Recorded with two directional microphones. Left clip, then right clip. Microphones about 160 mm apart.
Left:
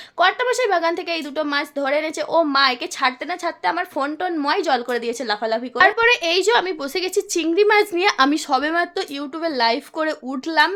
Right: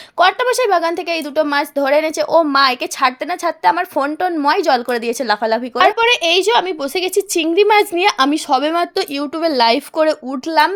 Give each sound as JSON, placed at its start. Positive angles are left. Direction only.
{"t": 0.2, "sound": "a woman's voice", "side_deg": -35}
{"t": 8.7, "sound": "speech", "side_deg": -40}
{"t": 10.1, "sound": "a woman's voice", "side_deg": -30}